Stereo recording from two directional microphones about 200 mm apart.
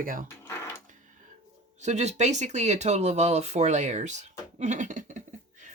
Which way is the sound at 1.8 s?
35° right (ahead or behind).